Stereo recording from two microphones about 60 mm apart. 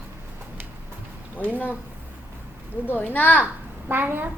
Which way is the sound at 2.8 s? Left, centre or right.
Left.